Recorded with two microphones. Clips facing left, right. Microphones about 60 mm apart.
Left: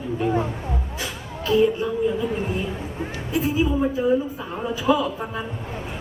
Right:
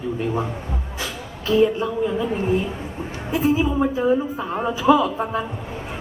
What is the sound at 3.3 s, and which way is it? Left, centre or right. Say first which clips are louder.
A woman's voice: right 2 dB; right.